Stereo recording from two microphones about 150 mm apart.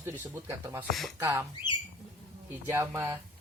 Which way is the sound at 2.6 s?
15° right (ahead or behind).